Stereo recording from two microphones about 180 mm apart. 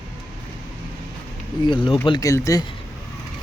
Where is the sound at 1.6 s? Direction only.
25° left (ahead or behind).